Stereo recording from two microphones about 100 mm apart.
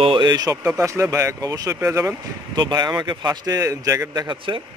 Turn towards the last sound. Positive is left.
turn(degrees=-55)  # may be behind; listen again after turning